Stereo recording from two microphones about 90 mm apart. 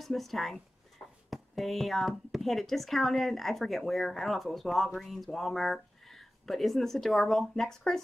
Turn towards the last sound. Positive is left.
turn(degrees=5)  # may be behind; listen again after turning